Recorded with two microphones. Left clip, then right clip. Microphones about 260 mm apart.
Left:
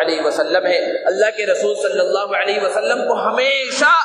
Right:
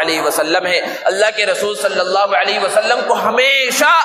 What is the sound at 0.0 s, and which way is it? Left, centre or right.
A man's voice, right.